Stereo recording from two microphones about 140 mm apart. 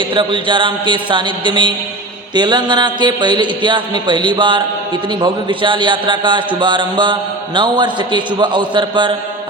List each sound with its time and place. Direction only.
0.1 s a man's voice: 35° right (ahead or behind)